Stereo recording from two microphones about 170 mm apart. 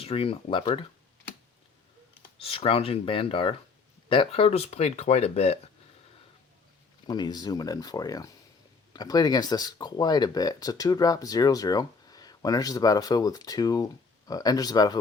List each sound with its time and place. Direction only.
0.0 s speech: 35° left (ahead or behind)
2.4 s speech: 35° left (ahead or behind)
7.1 s speech: 25° left (ahead or behind)